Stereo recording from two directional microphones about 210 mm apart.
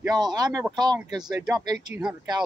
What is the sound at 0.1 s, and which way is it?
Speech, 20° right (ahead or behind).